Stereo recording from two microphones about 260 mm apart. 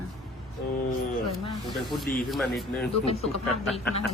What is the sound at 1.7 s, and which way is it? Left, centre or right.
A man's voice, centre.